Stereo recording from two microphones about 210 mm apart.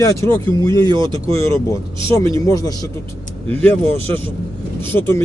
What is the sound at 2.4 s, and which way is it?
Speech, 15° left (ahead or behind).